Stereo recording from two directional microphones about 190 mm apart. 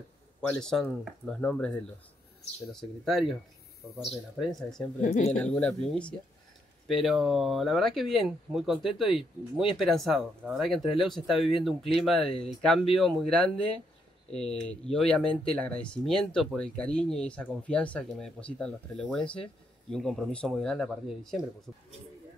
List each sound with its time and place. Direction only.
0.5 s speech: 5° left (ahead or behind)
5.0 s speech: 40° left (ahead or behind)
5.3 s speech: 5° left (ahead or behind)